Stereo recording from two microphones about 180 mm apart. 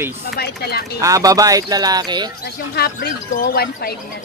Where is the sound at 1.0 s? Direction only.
20° right (ahead or behind).